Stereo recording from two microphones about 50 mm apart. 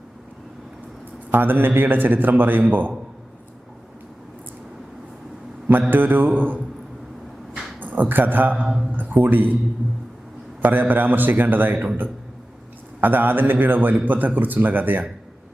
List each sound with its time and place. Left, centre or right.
1.3 s a man's voice: right
5.9 s a man's voice: right
7.8 s a man's voice: right
8.6 s speech: centre
9.0 s a man's voice: right
10.6 s a man's voice: right
13.0 s a man's voice: right